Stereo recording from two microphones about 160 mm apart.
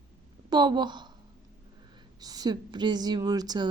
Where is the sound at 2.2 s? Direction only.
25° right (ahead or behind).